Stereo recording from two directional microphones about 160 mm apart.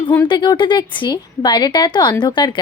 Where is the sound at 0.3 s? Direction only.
30° left (ahead or behind).